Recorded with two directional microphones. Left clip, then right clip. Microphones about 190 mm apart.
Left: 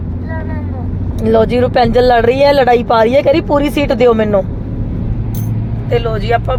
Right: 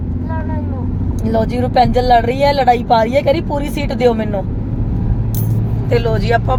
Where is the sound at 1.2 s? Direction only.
35° left (ahead or behind).